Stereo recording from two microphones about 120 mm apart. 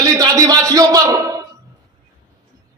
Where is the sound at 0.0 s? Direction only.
30° right (ahead or behind).